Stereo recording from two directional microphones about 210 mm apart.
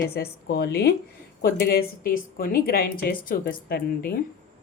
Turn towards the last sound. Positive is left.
turn(degrees=45)  # may be behind; listen again after turning